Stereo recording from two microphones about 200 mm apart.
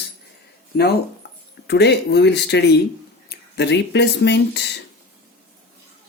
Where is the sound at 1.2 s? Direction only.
55° left (ahead or behind).